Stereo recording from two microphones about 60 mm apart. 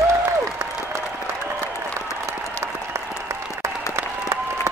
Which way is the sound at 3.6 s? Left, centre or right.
Right.